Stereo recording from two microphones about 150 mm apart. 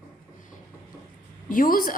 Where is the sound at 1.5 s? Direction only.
70° left (ahead or behind).